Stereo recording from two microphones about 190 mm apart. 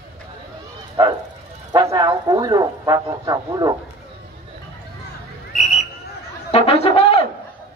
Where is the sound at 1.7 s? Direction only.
20° right (ahead or behind).